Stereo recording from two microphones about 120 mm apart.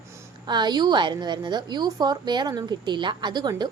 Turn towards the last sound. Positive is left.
turn(degrees=-35)  # may be behind; listen again after turning